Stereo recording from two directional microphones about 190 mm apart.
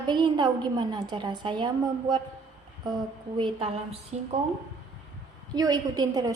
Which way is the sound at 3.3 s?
25° right (ahead or behind).